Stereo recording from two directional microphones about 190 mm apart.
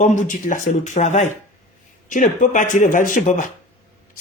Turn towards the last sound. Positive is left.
turn(degrees=40)  # may be behind; listen again after turning